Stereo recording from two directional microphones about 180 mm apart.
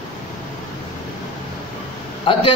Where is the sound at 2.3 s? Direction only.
30° left (ahead or behind).